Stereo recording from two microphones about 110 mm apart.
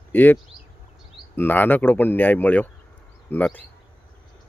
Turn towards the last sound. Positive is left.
turn(degrees=15)  # may be behind; listen again after turning